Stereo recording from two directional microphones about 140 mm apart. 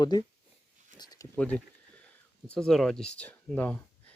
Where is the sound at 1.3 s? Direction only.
10° left (ahead or behind).